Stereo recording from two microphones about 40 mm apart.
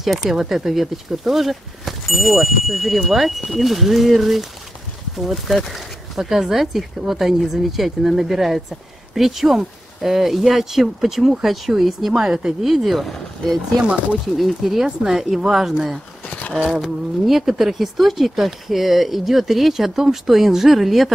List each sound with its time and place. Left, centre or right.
0.0 s speech: centre
16.3 s a sound: left
17.3 s speech: centre